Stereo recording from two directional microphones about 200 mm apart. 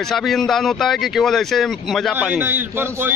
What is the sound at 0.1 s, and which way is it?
A man's voice, centre (ahead or behind).